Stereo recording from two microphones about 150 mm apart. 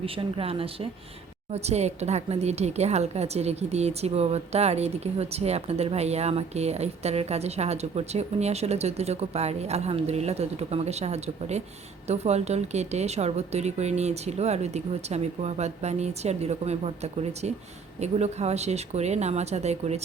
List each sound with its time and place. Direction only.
0.0 s a woman's voice: 35° right (ahead or behind)